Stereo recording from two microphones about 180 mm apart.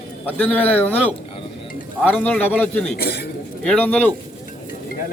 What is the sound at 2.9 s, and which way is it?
Speech, 60° left (ahead or behind).